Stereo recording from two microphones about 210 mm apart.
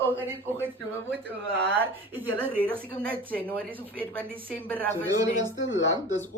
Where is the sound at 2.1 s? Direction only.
10° right (ahead or behind).